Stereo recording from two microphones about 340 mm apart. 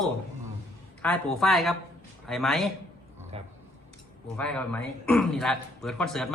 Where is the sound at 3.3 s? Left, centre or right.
Centre.